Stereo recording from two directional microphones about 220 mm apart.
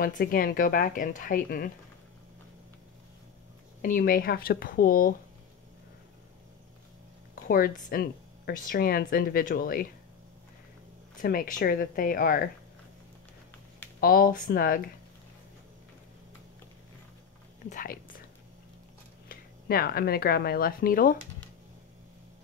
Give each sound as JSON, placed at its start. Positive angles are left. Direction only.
{"t": 0.0, "sound": "speech", "side_deg": 40}
{"t": 3.8, "sound": "speech", "side_deg": 40}
{"t": 7.4, "sound": "speech", "side_deg": 40}
{"t": 11.1, "sound": "speech", "side_deg": 40}
{"t": 14.0, "sound": "speech", "side_deg": 40}
{"t": 17.6, "sound": "speech", "side_deg": 40}
{"t": 19.2, "sound": "speech", "side_deg": 45}